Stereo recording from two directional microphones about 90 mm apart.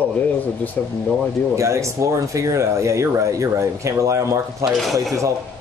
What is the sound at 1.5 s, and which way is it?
Speech, 35° right (ahead or behind).